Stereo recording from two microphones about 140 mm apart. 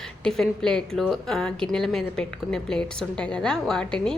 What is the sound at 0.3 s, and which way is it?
A woman's voice, 5° left (ahead or behind).